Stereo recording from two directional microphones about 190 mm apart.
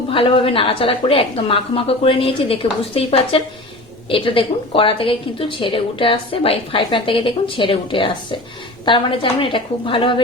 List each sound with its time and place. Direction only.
0.1 s a woman's voice: 30° left (ahead or behind)